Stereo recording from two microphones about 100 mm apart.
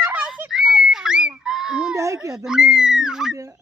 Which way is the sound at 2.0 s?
30° right (ahead or behind).